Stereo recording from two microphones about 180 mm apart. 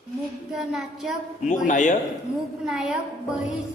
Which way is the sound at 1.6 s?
45° left (ahead or behind).